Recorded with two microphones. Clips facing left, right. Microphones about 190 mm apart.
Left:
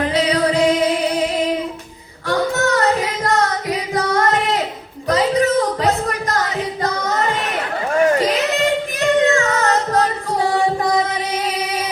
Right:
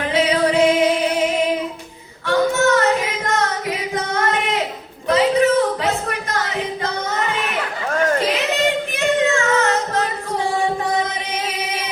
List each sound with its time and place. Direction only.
0.1 s music: 35° left (ahead or behind)
2.2 s singing: 35° left (ahead or behind)
5.0 s music: 40° left (ahead or behind)
9.0 s child singing: 35° left (ahead or behind)